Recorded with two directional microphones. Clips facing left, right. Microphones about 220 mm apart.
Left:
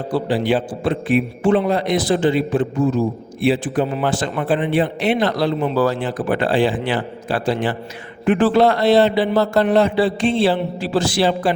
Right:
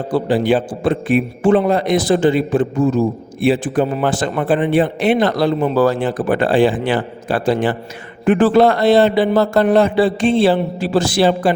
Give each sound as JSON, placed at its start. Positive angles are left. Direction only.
{"t": 0.1, "sound": "speech", "side_deg": -45}